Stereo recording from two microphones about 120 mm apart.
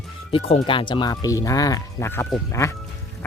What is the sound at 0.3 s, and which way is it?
Speech, 55° left (ahead or behind).